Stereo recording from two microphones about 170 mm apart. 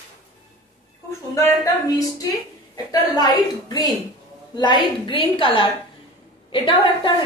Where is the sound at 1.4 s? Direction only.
20° left (ahead or behind).